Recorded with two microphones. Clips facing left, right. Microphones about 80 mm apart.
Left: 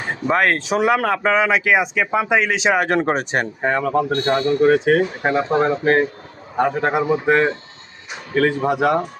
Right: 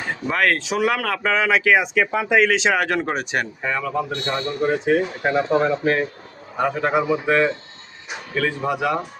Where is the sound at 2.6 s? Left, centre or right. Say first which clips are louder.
Left 2 dB; centre.